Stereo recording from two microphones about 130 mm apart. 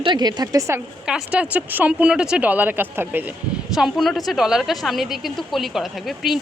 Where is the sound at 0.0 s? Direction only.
35° right (ahead or behind).